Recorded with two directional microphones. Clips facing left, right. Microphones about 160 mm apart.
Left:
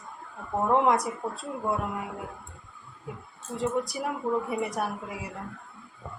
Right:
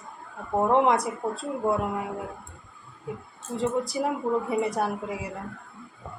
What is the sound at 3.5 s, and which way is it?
A woman's voice, 25° right (ahead or behind).